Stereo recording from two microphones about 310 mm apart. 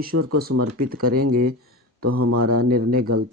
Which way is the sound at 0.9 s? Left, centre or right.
Right.